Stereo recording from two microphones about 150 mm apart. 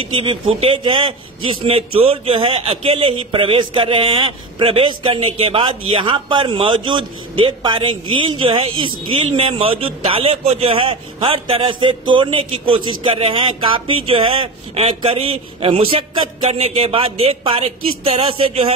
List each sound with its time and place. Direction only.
0.0 s a man's voice: 35° right (ahead or behind)